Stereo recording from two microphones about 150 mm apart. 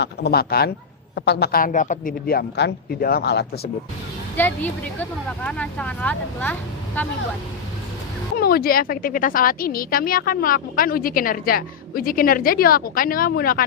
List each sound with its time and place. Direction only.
0.0 s a woman's voice: 90° left
4.4 s speech: 10° left (ahead or behind)
8.4 s a woman's voice: 80° left